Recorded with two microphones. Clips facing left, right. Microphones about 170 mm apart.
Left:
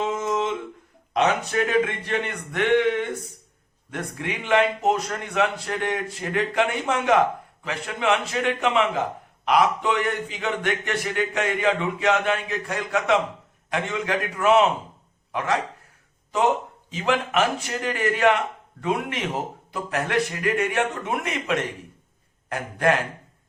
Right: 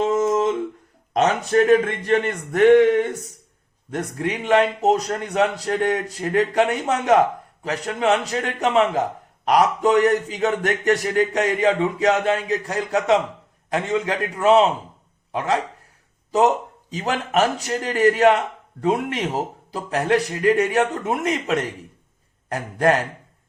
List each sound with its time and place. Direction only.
0.0 s a sound: 45° right (ahead or behind)
1.1 s a man's voice: 45° right (ahead or behind)
16.9 s a man's voice: 40° right (ahead or behind)